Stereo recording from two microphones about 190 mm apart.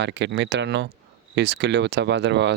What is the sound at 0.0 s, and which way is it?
Speech, 65° right (ahead or behind).